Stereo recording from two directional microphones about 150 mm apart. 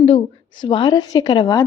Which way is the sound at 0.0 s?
35° left (ahead or behind).